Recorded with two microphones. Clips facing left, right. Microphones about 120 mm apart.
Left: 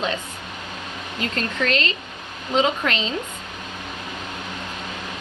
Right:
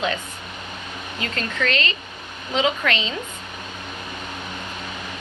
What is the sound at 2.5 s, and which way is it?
Speech, 40° left (ahead or behind).